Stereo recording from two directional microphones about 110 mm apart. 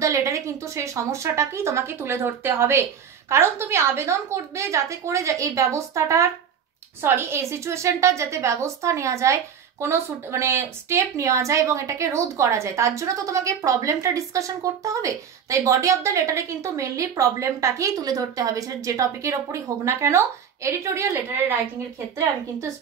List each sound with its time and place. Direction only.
0.0 s a woman's voice: 30° right (ahead or behind)